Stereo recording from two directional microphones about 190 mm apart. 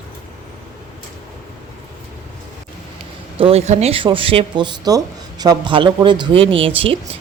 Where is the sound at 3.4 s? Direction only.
30° right (ahead or behind).